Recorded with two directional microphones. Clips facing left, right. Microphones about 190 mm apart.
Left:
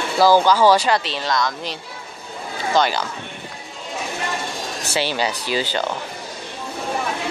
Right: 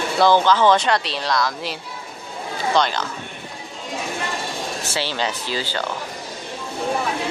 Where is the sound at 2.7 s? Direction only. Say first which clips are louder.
Left 1 dB; 5° left (ahead or behind).